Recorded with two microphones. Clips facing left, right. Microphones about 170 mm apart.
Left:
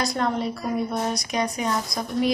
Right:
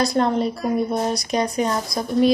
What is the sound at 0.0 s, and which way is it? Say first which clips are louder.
Speech: right 5 dB; 30° right (ahead or behind).